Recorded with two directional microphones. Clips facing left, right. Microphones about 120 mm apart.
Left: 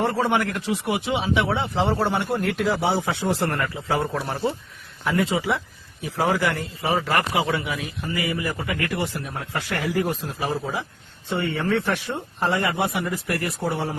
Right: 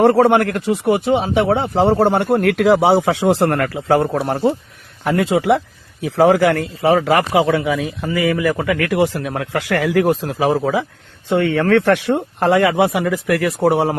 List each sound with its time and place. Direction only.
0.0 s speech: 60° right (ahead or behind)
5.0 s a man's voice: 70° right (ahead or behind); by 7.3 s 90° right
8.4 s speech: 90° right